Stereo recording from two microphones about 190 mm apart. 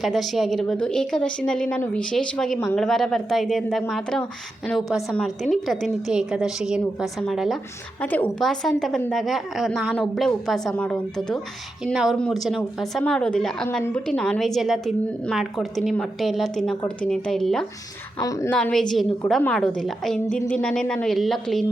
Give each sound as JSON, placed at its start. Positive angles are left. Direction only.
{"t": 0.0, "sound": "a woman's voice", "side_deg": 0}
{"t": 18.2, "sound": "a woman's voice", "side_deg": 15}
{"t": 18.5, "sound": "a woman's voice", "side_deg": 5}